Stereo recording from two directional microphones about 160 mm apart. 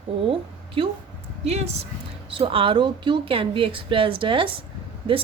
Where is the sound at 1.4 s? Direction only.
40° right (ahead or behind).